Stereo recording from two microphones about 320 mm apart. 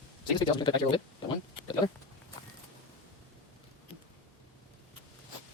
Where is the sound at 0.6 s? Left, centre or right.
Centre.